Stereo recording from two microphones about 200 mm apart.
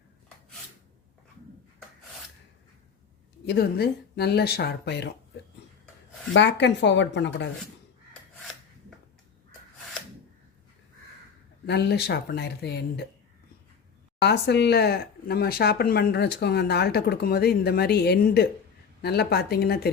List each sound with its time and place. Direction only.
3.4 s speech: 55° left (ahead or behind)
6.3 s speech: 60° left (ahead or behind)
11.6 s speech: 55° left (ahead or behind)
14.2 s speech: 55° left (ahead or behind)